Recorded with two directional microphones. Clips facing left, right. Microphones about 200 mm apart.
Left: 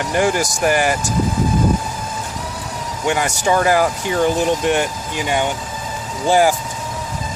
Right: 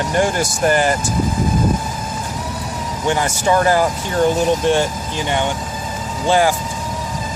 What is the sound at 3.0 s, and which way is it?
Speech, 15° left (ahead or behind).